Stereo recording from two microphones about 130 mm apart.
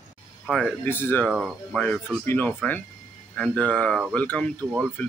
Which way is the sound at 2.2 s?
15° left (ahead or behind).